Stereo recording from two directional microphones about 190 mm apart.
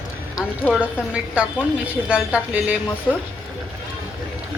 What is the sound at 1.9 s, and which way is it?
Speech, 5° right (ahead or behind).